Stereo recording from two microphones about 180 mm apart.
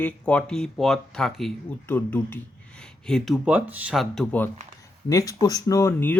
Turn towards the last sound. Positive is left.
turn(degrees=15)  # may be behind; listen again after turning